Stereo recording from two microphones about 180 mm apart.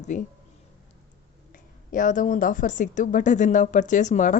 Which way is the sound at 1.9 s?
45° left (ahead or behind).